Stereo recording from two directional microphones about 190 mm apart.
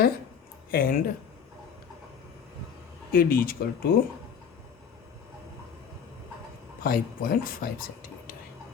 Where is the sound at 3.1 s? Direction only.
50° left (ahead or behind).